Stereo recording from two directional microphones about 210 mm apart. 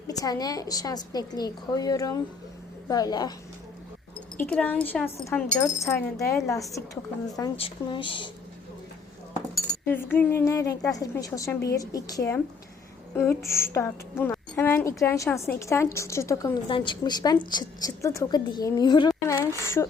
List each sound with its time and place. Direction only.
0.1 s a woman's voice: 15° left (ahead or behind)
4.4 s a woman's voice: 5° left (ahead or behind)
7.5 s speech: 25° left (ahead or behind)
9.8 s a woman's voice: 10° left (ahead or behind)